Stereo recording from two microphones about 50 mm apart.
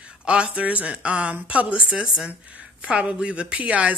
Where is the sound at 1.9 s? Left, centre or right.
Centre.